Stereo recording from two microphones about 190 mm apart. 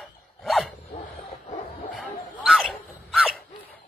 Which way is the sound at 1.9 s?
Centre (ahead or behind).